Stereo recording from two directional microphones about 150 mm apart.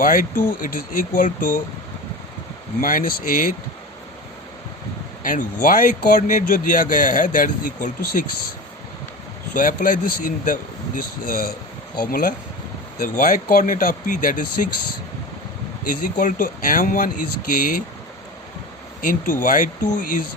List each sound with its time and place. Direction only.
0.0 s speech: 65° left (ahead or behind)
2.8 s speech: 75° left (ahead or behind)
5.2 s speech: 60° left (ahead or behind)
9.6 s speech: 60° left (ahead or behind)
15.9 s speech: 70° left (ahead or behind)
19.0 s speech: 65° left (ahead or behind)